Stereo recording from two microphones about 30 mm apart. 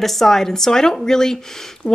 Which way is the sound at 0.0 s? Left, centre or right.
Centre.